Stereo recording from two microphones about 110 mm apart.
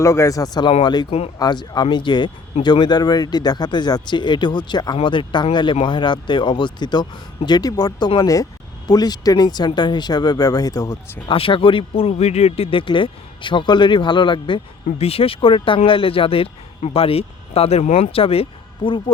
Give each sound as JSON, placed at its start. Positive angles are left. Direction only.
{"t": 0.0, "sound": "speech", "side_deg": 30}
{"t": 11.3, "sound": "speech", "side_deg": 55}
{"t": 12.7, "sound": "speech", "side_deg": 50}
{"t": 14.9, "sound": "speech", "side_deg": 65}
{"t": 18.9, "sound": "speech", "side_deg": 50}